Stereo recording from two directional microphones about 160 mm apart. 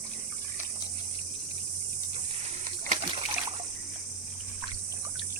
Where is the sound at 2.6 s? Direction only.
45° right (ahead or behind).